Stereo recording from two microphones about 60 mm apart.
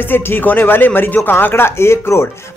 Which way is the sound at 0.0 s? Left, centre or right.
Left.